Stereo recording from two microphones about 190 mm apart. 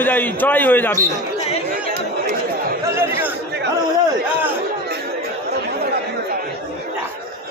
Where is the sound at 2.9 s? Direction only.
15° right (ahead or behind).